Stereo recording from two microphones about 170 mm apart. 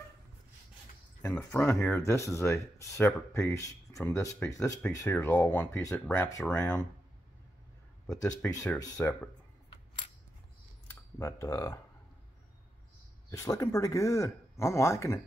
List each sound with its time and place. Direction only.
1.3 s speech: 15° left (ahead or behind)
8.1 s speech: 20° left (ahead or behind)
8.9 s speech: 5° left (ahead or behind)
10.9 s speech: 15° left (ahead or behind)
13.3 s speech: 20° left (ahead or behind)